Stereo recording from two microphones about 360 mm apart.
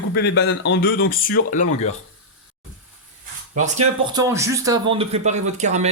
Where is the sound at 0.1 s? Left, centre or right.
Left.